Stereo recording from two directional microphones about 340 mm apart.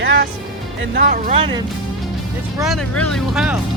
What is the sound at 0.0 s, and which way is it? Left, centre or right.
Music, right.